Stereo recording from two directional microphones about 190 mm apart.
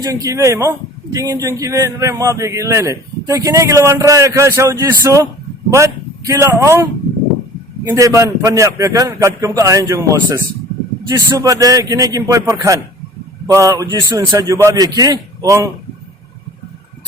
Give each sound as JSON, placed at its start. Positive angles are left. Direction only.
{"t": 0.0, "sound": "a man's voice", "side_deg": -15}
{"t": 7.9, "sound": "a man's voice", "side_deg": -15}